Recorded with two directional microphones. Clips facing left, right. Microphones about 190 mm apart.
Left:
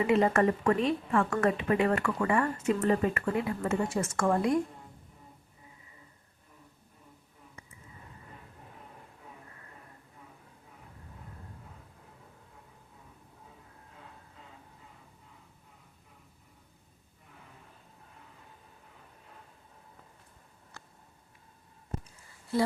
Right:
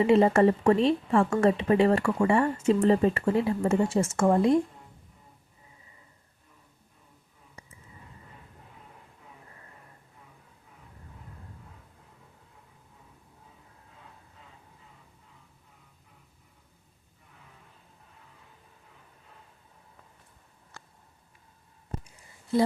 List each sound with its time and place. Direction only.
0.0 s speech: 30° right (ahead or behind)